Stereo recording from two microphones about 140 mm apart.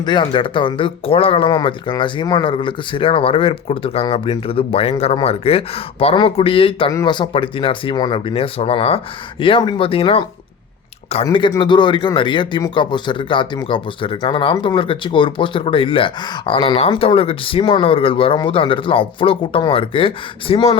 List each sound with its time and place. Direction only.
0.0 s speech: 35° left (ahead or behind)